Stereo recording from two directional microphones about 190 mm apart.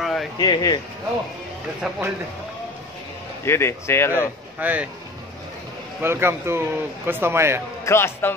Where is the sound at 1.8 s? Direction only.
Centre (ahead or behind).